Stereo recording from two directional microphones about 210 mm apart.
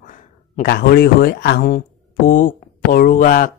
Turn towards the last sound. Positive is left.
turn(degrees=40)  # may be behind; listen again after turning